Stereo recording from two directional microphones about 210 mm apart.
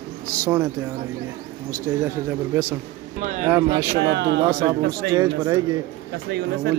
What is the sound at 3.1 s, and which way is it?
Speech, 35° right (ahead or behind).